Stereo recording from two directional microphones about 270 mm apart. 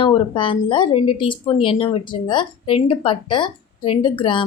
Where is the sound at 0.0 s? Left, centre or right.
Centre.